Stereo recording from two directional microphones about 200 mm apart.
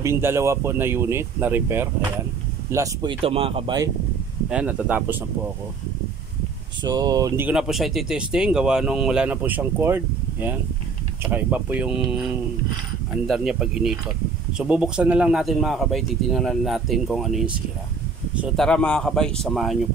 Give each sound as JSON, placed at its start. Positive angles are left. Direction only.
{"t": 0.0, "sound": "speech", "side_deg": -15}
{"t": 4.5, "sound": "speech", "side_deg": -5}
{"t": 6.8, "sound": "speech", "side_deg": -20}
{"t": 7.4, "sound": "speech", "side_deg": -5}
{"t": 18.7, "sound": "speech", "side_deg": 5}